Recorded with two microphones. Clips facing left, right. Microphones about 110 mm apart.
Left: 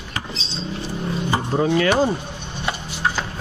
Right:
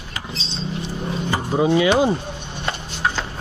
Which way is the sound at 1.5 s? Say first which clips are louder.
Right 2 dB; 15° right (ahead or behind).